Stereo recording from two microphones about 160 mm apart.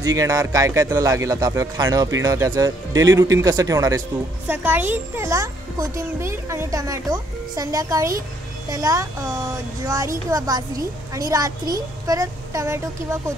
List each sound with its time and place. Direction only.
0.0 s speech: 25° right (ahead or behind)